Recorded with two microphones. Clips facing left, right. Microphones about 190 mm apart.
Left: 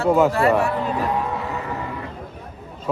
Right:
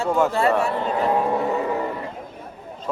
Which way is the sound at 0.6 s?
30° right (ahead or behind).